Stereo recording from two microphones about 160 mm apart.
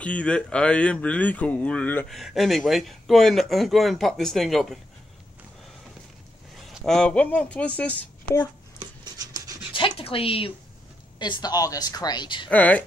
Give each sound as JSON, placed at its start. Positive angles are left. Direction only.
{"t": 0.0, "sound": "speech", "side_deg": 10}
{"t": 6.7, "sound": "speech", "side_deg": 5}
{"t": 9.2, "sound": "dog", "side_deg": -25}
{"t": 9.8, "sound": "a sound", "side_deg": 30}
{"t": 11.1, "sound": "speech", "side_deg": 30}
{"t": 12.4, "sound": "speech", "side_deg": 10}